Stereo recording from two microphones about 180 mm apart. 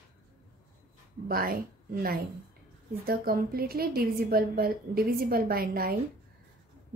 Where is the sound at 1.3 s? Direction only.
55° right (ahead or behind).